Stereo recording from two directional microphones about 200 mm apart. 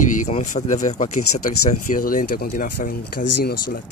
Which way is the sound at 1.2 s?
90° left.